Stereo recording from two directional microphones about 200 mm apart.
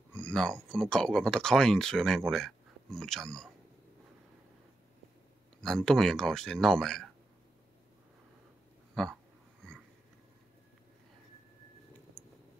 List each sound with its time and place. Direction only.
0.1 s speech: 5° left (ahead or behind)
5.6 s speech: 5° left (ahead or behind)
9.0 s speech: 5° left (ahead or behind)